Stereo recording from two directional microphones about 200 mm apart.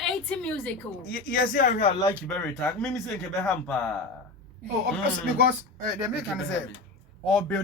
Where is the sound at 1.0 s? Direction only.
45° left (ahead or behind).